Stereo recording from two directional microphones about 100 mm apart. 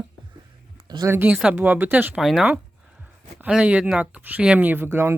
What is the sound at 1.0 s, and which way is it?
Speech, 20° right (ahead or behind).